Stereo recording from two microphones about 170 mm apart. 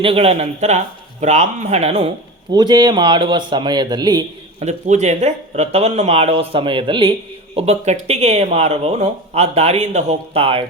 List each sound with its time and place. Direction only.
0.0 s speech: 35° right (ahead or behind)
2.5 s speech: 25° right (ahead or behind)
4.6 s speech: 40° right (ahead or behind)